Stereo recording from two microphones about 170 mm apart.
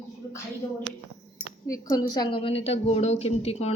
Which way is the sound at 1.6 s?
20° left (ahead or behind).